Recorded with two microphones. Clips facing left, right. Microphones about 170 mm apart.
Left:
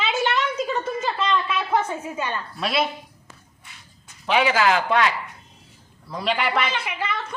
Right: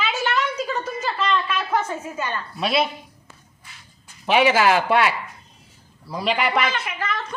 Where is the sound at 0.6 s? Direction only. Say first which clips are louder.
Left 1 dB; 5° left (ahead or behind).